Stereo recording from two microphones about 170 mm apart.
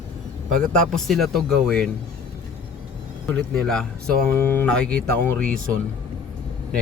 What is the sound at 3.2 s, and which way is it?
Speech, 5° left (ahead or behind).